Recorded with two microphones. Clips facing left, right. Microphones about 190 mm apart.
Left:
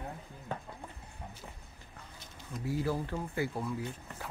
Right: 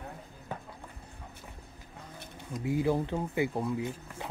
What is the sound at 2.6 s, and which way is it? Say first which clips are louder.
Speech: right 5 dB; 20° right (ahead or behind).